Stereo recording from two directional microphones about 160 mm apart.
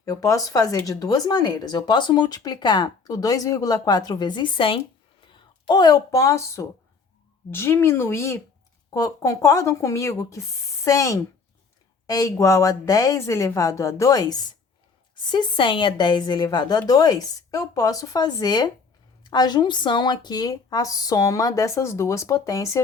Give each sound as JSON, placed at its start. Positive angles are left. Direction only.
{"t": 0.0, "sound": "speech", "side_deg": 20}